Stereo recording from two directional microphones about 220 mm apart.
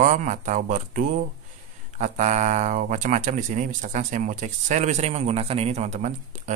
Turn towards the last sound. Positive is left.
turn(degrees=-30)  # may be behind; listen again after turning